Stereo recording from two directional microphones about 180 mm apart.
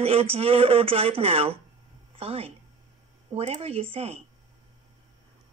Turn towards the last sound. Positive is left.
turn(degrees=-35)  # may be behind; listen again after turning